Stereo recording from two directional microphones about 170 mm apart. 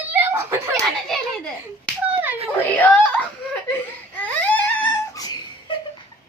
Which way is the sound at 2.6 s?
10° left (ahead or behind).